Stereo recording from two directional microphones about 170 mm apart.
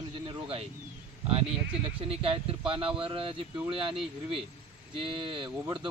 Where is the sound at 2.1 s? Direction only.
35° right (ahead or behind).